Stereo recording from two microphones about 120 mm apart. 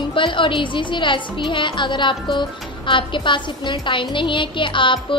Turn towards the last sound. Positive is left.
turn(degrees=45)  # may be behind; listen again after turning